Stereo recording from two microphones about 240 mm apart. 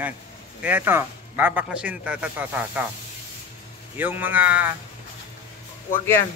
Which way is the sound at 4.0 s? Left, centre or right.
Centre.